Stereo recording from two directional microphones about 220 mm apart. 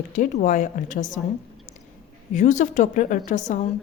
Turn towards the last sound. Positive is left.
turn(degrees=35)  # may be behind; listen again after turning